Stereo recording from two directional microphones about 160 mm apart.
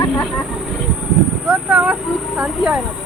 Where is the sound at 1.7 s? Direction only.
5° right (ahead or behind).